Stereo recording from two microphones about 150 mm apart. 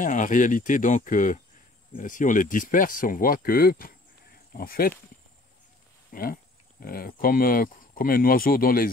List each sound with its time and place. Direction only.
0.0 s speech: 55° left (ahead or behind); by 4.9 s 85° left
6.1 s speech: 75° left (ahead or behind)